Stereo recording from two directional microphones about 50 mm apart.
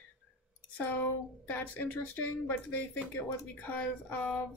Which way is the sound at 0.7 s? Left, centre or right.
Left.